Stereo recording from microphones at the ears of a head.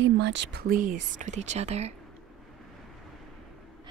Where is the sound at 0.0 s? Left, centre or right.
Right.